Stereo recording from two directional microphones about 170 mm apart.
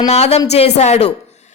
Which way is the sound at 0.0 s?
40° left (ahead or behind).